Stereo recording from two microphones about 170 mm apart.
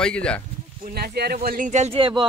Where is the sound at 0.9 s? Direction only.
65° right (ahead or behind); by 2.3 s 30° right (ahead or behind).